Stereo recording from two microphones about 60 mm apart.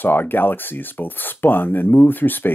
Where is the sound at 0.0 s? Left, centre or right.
Left.